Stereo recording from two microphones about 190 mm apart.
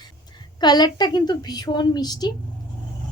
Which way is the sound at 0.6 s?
20° left (ahead or behind).